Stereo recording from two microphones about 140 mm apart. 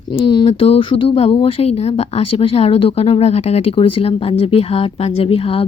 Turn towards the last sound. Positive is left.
turn(degrees=45)  # may be behind; listen again after turning